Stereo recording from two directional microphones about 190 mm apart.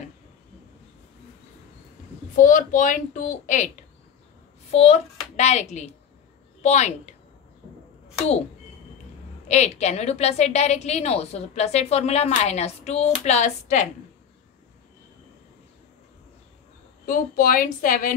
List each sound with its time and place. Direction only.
2.4 s speech: 45° left (ahead or behind)
4.6 s a woman's voice: 35° left (ahead or behind)
8.2 s a woman's voice: 35° left (ahead or behind)
9.5 s a woman's voice: 35° left (ahead or behind)
17.0 s speech: 45° left (ahead or behind)